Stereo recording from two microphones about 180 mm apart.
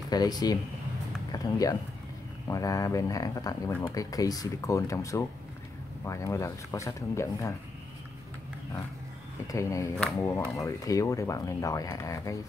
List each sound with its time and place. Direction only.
0.1 s speech: 20° left (ahead or behind)
9.5 s speech: 15° left (ahead or behind)